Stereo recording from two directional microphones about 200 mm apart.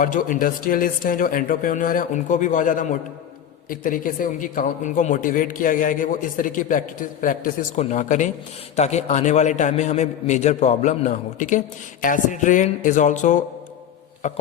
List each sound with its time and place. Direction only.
0.0 s speech: 40° left (ahead or behind)